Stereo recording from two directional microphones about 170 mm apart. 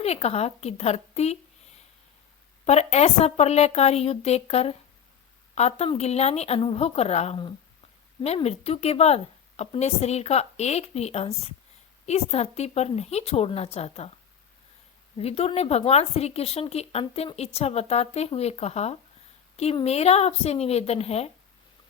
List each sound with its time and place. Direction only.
0.0 s speech: 40° left (ahead or behind)
2.6 s speech: 40° left (ahead or behind)
15.2 s speech: 35° left (ahead or behind)